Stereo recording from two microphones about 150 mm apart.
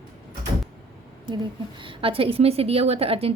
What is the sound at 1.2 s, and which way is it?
A woman's voice, 30° right (ahead or behind).